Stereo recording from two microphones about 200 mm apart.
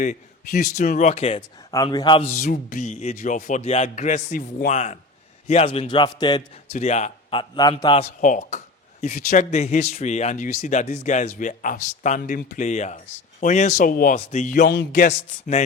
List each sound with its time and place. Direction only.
0.0 s a man's voice: 40° left (ahead or behind); by 6.6 s 20° left (ahead or behind)
6.7 s a man's voice: 35° left (ahead or behind)